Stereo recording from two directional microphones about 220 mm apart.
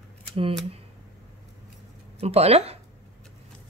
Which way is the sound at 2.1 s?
30° right (ahead or behind).